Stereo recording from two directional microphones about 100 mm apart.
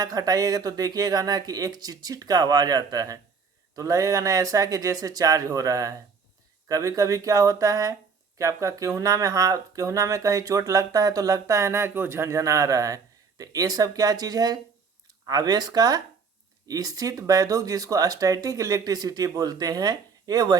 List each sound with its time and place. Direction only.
0.0 s speech: 40° right (ahead or behind)